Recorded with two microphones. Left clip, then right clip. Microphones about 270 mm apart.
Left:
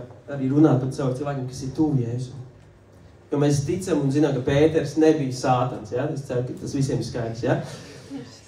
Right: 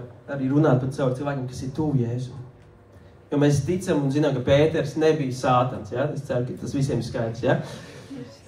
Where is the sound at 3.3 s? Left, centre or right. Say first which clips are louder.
Right 1 dB; right.